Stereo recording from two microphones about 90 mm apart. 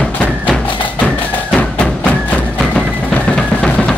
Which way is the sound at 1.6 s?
15° left (ahead or behind).